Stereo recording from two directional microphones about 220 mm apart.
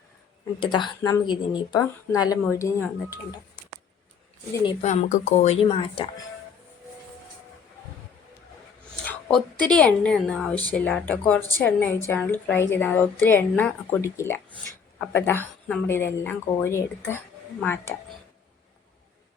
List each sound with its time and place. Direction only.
0.6 s a woman's voice: 20° left (ahead or behind)
4.8 s speech: 30° left (ahead or behind)
9.0 s a woman's voice: 5° left (ahead or behind)